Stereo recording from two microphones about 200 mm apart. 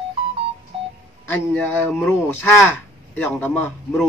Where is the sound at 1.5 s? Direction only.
10° left (ahead or behind).